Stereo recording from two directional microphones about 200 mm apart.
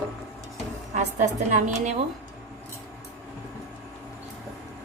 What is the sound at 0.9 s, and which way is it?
A woman's voice, 35° right (ahead or behind).